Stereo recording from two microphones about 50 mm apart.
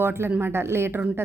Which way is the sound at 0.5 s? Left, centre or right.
Right.